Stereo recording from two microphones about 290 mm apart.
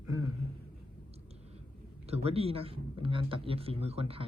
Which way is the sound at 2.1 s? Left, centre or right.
Right.